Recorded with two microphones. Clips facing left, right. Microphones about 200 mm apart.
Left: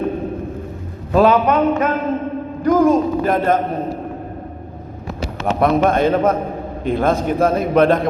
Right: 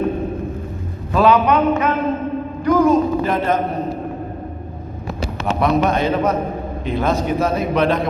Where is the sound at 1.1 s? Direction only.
45° left (ahead or behind).